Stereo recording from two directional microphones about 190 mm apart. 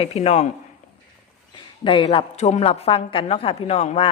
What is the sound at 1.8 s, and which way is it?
A woman's voice, 25° left (ahead or behind).